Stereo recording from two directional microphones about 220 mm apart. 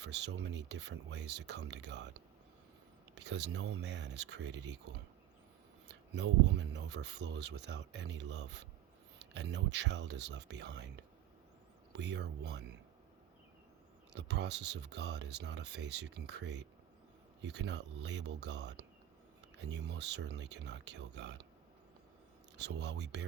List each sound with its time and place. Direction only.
0.0 s speech: 50° right (ahead or behind)
3.2 s speech: 50° right (ahead or behind)
6.1 s speech: 55° right (ahead or behind)
14.1 s speech: 50° right (ahead or behind)
22.5 s speech: 50° right (ahead or behind)